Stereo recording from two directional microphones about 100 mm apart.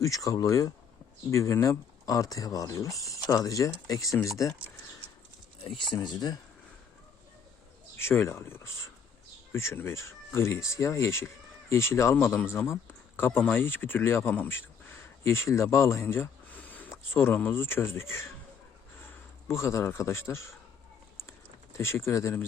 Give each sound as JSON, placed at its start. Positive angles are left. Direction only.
{"t": 0.0, "sound": "speech", "side_deg": 35}
{"t": 5.9, "sound": "speech", "side_deg": 45}
{"t": 7.9, "sound": "a man's voice", "side_deg": 25}
{"t": 19.5, "sound": "a man's voice", "side_deg": 30}
{"t": 21.2, "sound": "a sound", "side_deg": 25}